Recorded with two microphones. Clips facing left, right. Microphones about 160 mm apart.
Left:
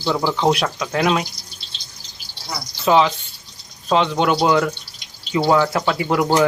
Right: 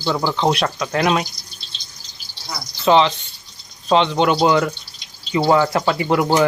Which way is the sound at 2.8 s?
5° left (ahead or behind).